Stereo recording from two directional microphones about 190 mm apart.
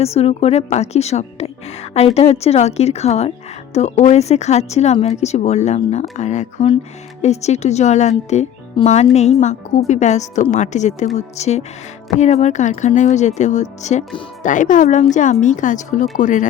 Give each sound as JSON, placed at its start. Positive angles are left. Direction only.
{"t": 0.0, "sound": "a woman's voice", "side_deg": 35}